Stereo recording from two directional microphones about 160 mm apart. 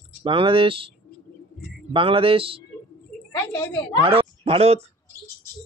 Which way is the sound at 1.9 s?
35° right (ahead or behind).